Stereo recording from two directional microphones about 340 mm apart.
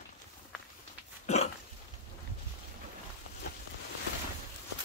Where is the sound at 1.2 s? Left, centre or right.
Centre.